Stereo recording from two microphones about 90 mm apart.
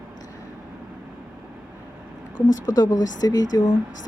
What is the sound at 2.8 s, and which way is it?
Speech, 50° left (ahead or behind).